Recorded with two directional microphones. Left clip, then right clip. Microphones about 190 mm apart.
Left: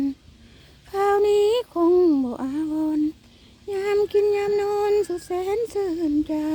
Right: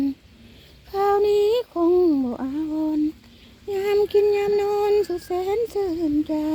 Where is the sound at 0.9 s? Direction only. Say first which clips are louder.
Even; 10° left (ahead or behind).